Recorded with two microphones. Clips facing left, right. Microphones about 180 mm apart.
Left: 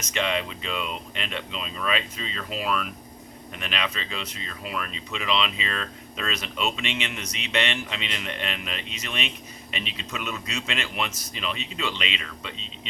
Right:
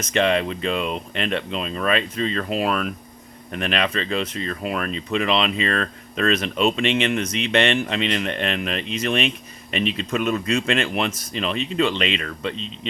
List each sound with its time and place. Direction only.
0.0 s speech: 50° right (ahead or behind)